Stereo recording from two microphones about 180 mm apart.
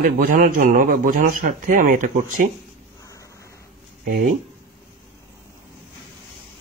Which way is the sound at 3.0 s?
15° left (ahead or behind).